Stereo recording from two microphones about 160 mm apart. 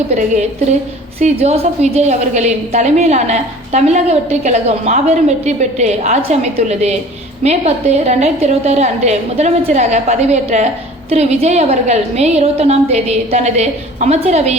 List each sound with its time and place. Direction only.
0.1 s a woman's voice: 45° right (ahead or behind)